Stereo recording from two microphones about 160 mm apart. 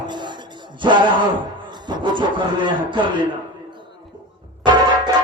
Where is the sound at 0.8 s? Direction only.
30° right (ahead or behind).